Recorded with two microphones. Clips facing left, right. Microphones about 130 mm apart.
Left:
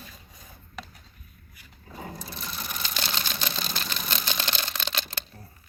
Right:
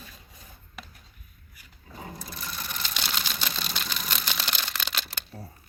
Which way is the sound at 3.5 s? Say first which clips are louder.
Left 1 dB; 5° left (ahead or behind).